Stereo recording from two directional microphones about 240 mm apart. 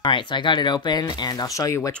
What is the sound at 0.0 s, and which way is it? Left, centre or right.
Speech, centre.